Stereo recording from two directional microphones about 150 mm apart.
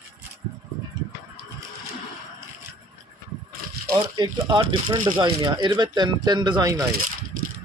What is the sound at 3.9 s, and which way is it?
Speech, 30° right (ahead or behind).